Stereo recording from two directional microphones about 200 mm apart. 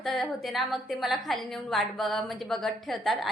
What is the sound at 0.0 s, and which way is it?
A woman's voice, centre (ahead or behind).